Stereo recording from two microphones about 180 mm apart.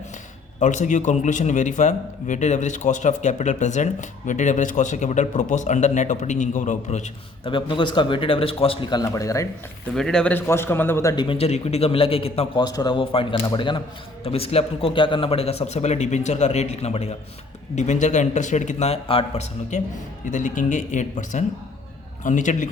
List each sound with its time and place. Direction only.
0.6 s a man's voice: 45° left (ahead or behind)
7.5 s a man's voice: 25° left (ahead or behind)
9.9 s a man's voice: 5° left (ahead or behind); by 22.7 s 45° left (ahead or behind)